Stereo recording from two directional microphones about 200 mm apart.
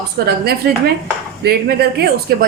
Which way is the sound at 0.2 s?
60° right (ahead or behind).